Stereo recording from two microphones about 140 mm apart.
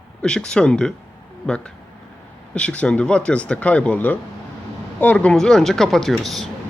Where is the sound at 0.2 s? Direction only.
5° left (ahead or behind).